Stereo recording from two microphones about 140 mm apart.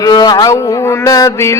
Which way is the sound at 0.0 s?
30° left (ahead or behind).